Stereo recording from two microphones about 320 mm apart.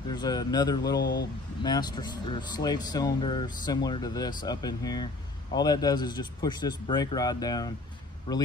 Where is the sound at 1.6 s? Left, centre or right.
Centre.